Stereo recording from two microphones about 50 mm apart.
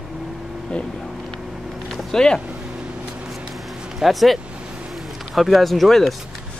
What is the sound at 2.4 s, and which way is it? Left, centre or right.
Vehicle, right.